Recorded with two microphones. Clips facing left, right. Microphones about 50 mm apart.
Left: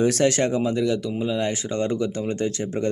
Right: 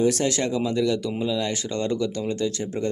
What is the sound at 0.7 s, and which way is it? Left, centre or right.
Speech, centre.